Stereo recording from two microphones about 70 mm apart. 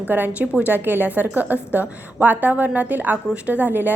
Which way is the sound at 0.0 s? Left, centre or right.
Right.